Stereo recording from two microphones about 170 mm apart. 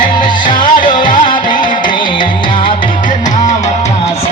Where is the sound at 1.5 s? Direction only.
50° left (ahead or behind).